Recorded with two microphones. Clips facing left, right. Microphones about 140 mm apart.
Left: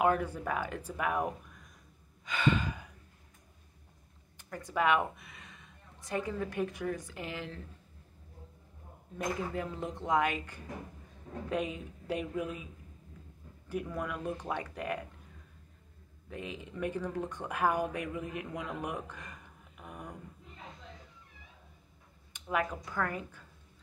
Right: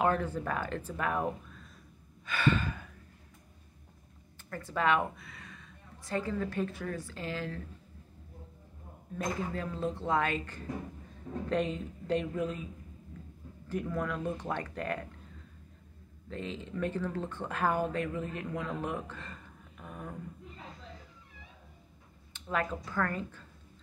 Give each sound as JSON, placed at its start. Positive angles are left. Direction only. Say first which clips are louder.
{"t": 0.0, "sound": "speech", "louder": "even", "side_deg": 10}
{"t": 2.2, "sound": "gasp", "louder": "even", "side_deg": 15}
{"t": 4.4, "sound": "a woman's voice", "louder": "left 1 dB", "side_deg": 15}
{"t": 9.5, "sound": "speech", "louder": "right 2 dB", "side_deg": 15}
{"t": 13.7, "sound": "speech", "louder": "right 2 dB", "side_deg": 10}
{"t": 16.3, "sound": "speech", "louder": "right 3 dB", "side_deg": 15}
{"t": 22.3, "sound": "speech", "louder": "even", "side_deg": 10}